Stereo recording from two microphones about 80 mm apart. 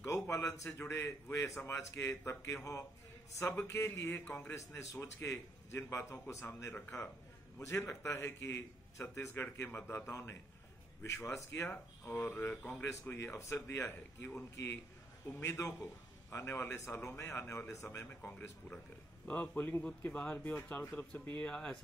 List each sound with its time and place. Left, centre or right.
0.0 s a sound: left
0.7 s a man's voice: left
4.2 s speech: left
4.6 s a man's voice: left
7.5 s a man's voice: left
20.8 s a man's voice: left
21.5 s speech: centre